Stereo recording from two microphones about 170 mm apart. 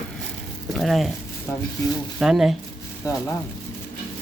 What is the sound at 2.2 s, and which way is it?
Speech, centre (ahead or behind).